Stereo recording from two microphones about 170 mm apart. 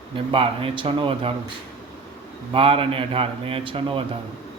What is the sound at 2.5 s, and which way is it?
A man's voice, 30° right (ahead or behind).